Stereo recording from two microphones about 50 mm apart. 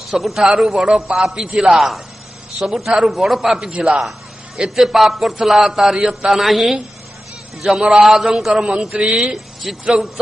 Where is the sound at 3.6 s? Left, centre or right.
Right.